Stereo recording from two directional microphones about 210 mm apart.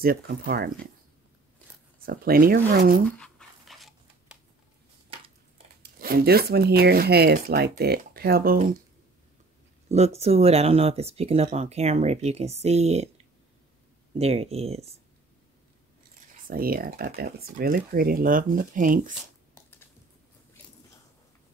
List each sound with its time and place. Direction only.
0.0 s speech: 45° right (ahead or behind)
2.0 s speech: 45° right (ahead or behind)
3.1 s a sound: 5° left (ahead or behind)
5.8 s speech: 45° right (ahead or behind)
9.8 s speech: 30° right (ahead or behind)
14.1 s speech: 30° right (ahead or behind)
16.3 s speech: 40° right (ahead or behind)